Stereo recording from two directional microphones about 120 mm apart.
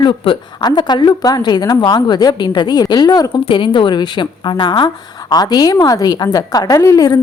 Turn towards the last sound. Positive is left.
turn(degrees=30)  # may be behind; listen again after turning